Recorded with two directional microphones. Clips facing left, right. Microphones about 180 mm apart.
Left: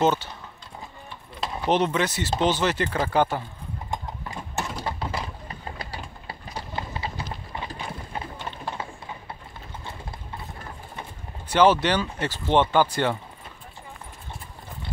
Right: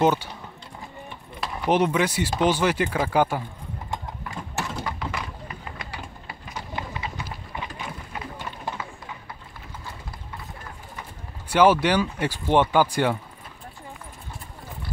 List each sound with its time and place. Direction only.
0.0 s speech: 10° right (ahead or behind)
1.4 s keys jangling: 20° left (ahead or behind)
1.7 s speech: 10° right (ahead or behind)
3.9 s clip-clop: 20° left (ahead or behind)
4.8 s a sound: 30° left (ahead or behind)
7.6 s clip-clop: 30° left (ahead or behind)
11.4 s speech: 10° right (ahead or behind)